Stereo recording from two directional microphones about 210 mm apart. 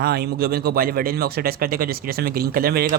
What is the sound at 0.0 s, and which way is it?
Speech, 45° right (ahead or behind).